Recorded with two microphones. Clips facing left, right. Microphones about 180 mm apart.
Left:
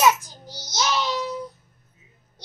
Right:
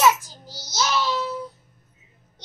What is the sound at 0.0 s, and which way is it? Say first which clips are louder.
Child singing: even; 15° left (ahead or behind).